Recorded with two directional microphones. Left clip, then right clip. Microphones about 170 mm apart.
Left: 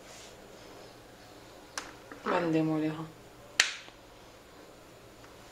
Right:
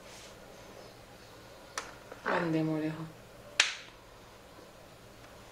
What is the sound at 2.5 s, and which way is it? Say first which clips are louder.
Speech: left 3 dB; 30° left (ahead or behind).